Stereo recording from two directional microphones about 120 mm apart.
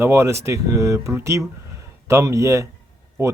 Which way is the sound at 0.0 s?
20° right (ahead or behind).